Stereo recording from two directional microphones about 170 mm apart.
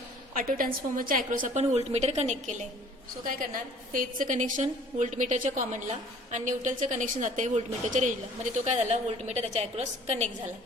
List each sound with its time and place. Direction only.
0.3 s a woman's voice: 55° right (ahead or behind)
3.2 s a woman's voice: 55° right (ahead or behind)